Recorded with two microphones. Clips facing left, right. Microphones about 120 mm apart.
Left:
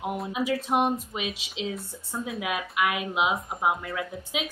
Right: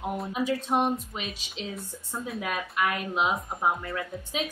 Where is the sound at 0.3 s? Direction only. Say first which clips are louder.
Left 1 dB; 10° left (ahead or behind).